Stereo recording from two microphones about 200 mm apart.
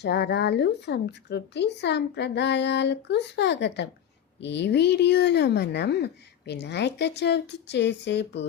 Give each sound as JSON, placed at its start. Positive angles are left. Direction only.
{"t": 0.0, "sound": "a woman's voice", "side_deg": 55}